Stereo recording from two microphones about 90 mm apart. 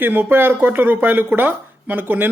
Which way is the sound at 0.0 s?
25° right (ahead or behind).